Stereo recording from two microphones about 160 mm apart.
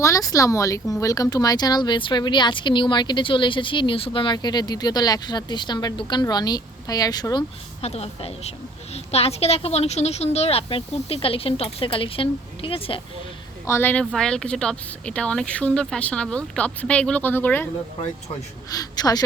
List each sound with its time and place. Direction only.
0.0 s speech: 20° left (ahead or behind)
7.8 s a woman's voice: 40° left (ahead or behind)
13.7 s speech: 15° left (ahead or behind)
14.0 s speech: 5° left (ahead or behind)
18.7 s speech: 25° left (ahead or behind)